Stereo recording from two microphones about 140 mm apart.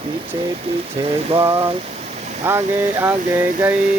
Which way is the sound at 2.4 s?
15° right (ahead or behind).